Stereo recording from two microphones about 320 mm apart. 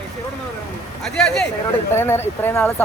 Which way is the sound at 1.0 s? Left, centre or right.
Centre.